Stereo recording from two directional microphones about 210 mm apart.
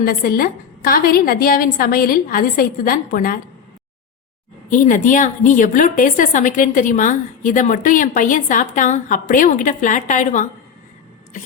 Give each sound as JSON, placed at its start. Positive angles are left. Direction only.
{"t": 0.0, "sound": "a woman's voice", "side_deg": 45}
{"t": 4.7, "sound": "a woman's voice", "side_deg": 35}